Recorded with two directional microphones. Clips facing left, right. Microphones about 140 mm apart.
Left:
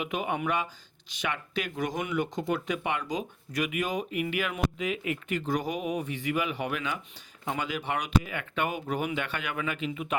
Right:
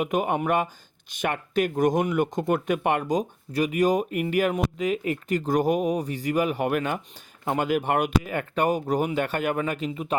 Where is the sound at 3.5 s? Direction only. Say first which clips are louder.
Right 8 dB; 35° right (ahead or behind).